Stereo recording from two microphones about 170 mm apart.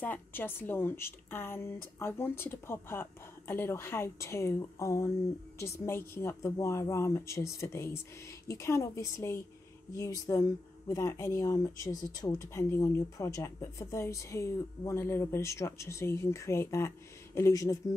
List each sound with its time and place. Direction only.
0.0 s speech: 10° left (ahead or behind)